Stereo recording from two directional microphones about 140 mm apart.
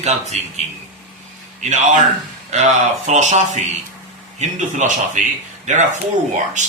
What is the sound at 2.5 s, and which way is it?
A man's voice, 55° right (ahead or behind).